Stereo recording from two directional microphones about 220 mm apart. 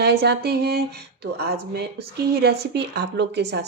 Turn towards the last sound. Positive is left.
turn(degrees=-50)  # may be behind; listen again after turning